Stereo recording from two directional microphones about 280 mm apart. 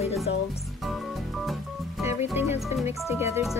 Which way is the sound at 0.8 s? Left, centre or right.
Centre.